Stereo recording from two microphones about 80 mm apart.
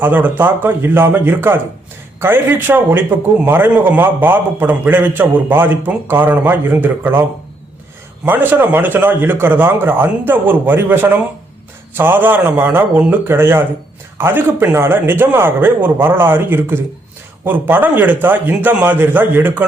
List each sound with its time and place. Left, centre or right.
0.0 s a man's voice: right